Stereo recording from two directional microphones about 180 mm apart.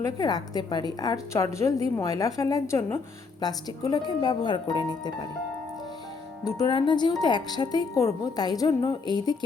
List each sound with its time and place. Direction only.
0.0 s a woman's voice: 20° left (ahead or behind)
6.6 s a woman's voice: 25° left (ahead or behind)